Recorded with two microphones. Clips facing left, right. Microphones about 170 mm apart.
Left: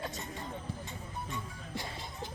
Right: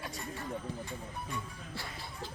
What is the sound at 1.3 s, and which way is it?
Music, 20° left (ahead or behind).